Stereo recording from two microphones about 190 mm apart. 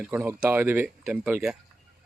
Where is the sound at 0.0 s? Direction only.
10° right (ahead or behind).